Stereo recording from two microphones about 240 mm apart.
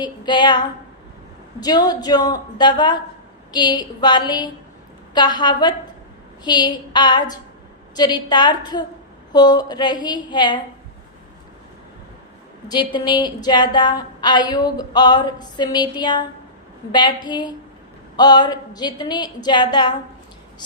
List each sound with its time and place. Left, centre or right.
0.0 s a woman's voice: centre
1.6 s a woman's voice: centre
12.6 s a woman's voice: centre